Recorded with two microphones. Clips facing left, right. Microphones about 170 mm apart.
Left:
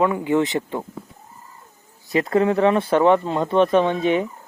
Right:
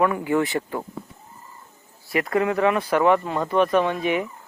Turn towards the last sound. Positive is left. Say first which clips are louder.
# left 3 dB
turn(degrees=25)  # may be behind; listen again after turning